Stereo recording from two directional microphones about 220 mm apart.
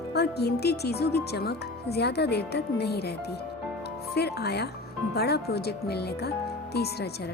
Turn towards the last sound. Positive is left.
turn(degrees=45)  # may be behind; listen again after turning